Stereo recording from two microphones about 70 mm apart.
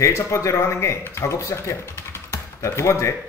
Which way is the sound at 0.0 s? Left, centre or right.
Left.